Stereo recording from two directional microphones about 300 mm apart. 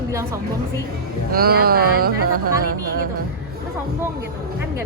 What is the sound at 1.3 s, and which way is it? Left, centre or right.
Speech, right.